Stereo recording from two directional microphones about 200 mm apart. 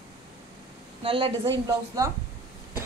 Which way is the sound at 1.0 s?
25° right (ahead or behind).